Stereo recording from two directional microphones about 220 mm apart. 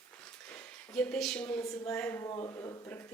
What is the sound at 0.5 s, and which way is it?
A woman's voice, 5° left (ahead or behind).